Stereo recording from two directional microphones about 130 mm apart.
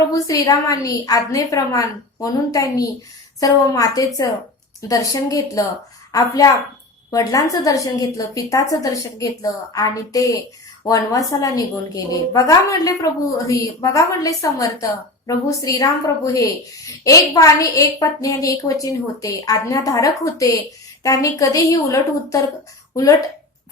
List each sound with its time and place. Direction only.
0.0 s a woman's voice: 25° left (ahead or behind)